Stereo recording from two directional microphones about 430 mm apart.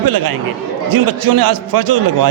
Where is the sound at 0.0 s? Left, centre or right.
Right.